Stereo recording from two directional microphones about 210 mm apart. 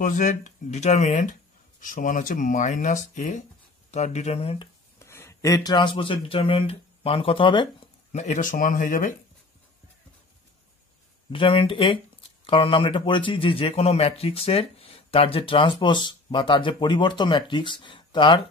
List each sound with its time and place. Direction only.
0.0 s speech: 35° left (ahead or behind)
4.9 s speech: 10° left (ahead or behind); by 9.1 s 40° left (ahead or behind)
11.2 s speech: 25° left (ahead or behind)